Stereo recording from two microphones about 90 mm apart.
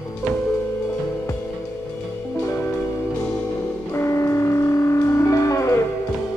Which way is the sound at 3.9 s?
30° left (ahead or behind).